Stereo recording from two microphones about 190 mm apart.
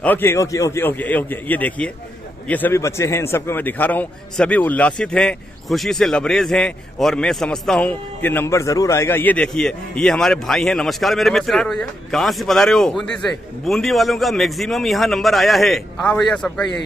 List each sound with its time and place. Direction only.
0.0 s a man's voice: 10° left (ahead or behind)